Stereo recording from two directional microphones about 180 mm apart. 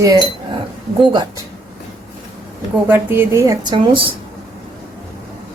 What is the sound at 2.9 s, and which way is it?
Speech, 10° right (ahead or behind).